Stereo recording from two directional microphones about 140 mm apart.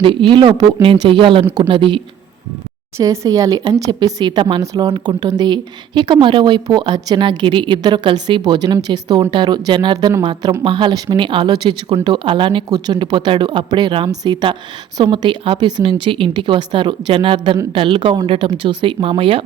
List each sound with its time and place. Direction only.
0.0 s speech: 35° right (ahead or behind)
3.0 s speech: 25° right (ahead or behind); by 19.4 s 40° right (ahead or behind)